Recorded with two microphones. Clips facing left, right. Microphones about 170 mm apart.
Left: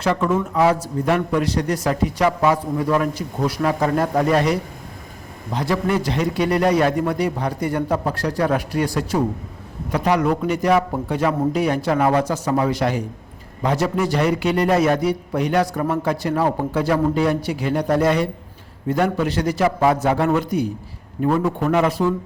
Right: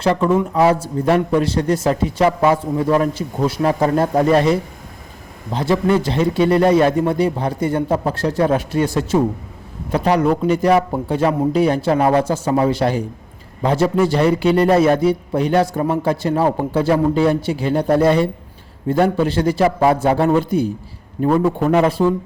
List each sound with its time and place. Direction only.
0.0 s a man's voice: 30° right (ahead or behind)
5.5 s a man's voice: 25° right (ahead or behind)